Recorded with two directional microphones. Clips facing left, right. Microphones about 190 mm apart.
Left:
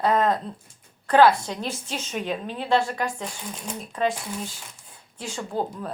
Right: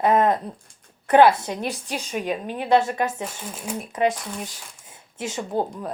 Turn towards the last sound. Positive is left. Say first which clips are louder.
# right 3 dB
turn(degrees=-20)  # may be behind; listen again after turning